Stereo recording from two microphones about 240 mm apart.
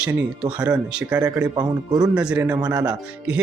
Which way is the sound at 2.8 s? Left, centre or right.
Centre.